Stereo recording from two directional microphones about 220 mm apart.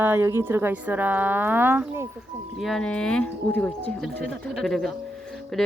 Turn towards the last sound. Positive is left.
turn(degrees=0)  # may be behind; listen again after turning